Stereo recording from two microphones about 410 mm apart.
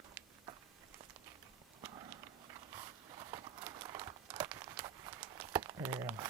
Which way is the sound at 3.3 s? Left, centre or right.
Centre.